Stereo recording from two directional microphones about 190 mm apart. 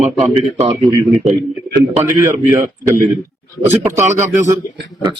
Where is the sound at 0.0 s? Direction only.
35° right (ahead or behind).